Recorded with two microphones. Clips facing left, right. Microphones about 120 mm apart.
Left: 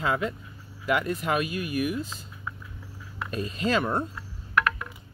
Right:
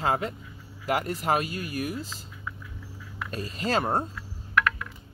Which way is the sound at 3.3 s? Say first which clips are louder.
Left 2 dB; 30° right (ahead or behind).